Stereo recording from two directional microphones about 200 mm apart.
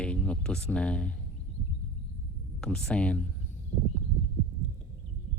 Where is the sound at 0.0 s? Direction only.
5° left (ahead or behind).